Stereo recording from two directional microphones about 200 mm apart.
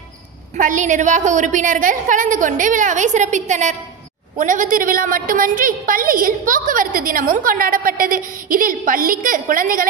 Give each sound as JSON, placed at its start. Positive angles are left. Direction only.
{"t": 0.6, "sound": "a woman's voice", "side_deg": -40}